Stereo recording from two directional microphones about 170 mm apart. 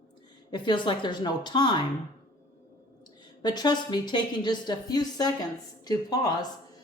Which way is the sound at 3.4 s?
25° left (ahead or behind).